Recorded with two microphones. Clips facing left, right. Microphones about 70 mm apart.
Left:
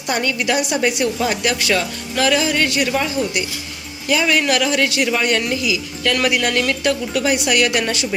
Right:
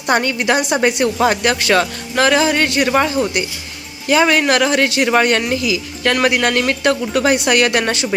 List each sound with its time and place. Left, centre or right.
0.1 s a woman's voice: right